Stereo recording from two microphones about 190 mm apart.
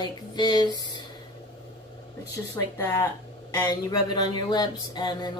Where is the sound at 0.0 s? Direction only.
20° left (ahead or behind).